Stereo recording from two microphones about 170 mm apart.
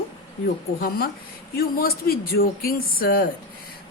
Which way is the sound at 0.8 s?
65° left (ahead or behind).